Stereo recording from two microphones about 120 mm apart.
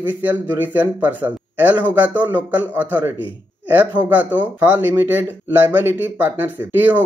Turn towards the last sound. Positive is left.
turn(degrees=-15)  # may be behind; listen again after turning